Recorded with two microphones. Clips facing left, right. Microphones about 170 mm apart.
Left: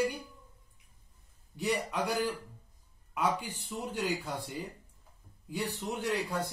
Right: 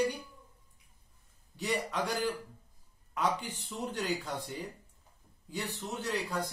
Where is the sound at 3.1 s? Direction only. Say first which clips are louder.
Left 1 dB; 10° left (ahead or behind).